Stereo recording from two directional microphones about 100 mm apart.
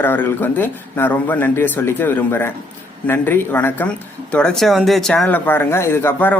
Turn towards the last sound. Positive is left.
turn(degrees=20)  # may be behind; listen again after turning